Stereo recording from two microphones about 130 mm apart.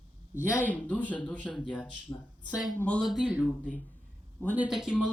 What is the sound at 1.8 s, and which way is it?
Speech, 35° left (ahead or behind).